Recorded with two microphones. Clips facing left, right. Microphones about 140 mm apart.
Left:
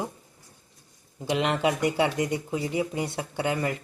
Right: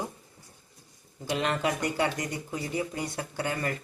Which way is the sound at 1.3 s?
20° left (ahead or behind).